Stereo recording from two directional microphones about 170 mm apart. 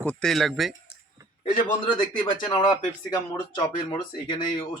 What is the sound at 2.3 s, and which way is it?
Speech, 25° left (ahead or behind).